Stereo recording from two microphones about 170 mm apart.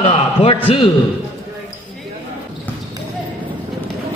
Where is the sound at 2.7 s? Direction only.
10° left (ahead or behind).